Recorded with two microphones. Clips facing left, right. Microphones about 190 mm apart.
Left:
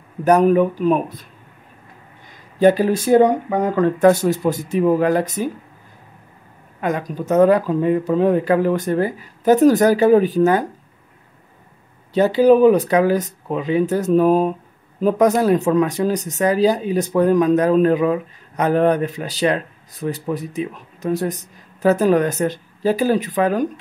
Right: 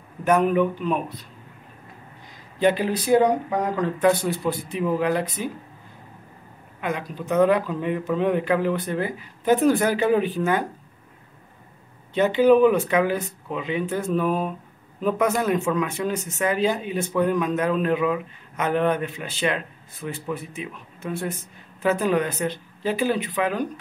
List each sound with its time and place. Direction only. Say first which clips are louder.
0.2 s speech: left 6 dB; 40° left (ahead or behind)
2.6 s speech: left 7 dB; 45° left (ahead or behind)
6.8 s speech: left 6 dB; 45° left (ahead or behind)
12.1 s speech: left 4 dB; 40° left (ahead or behind)